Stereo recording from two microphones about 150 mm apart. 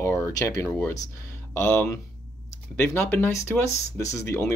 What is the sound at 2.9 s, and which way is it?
Speech, 15° left (ahead or behind).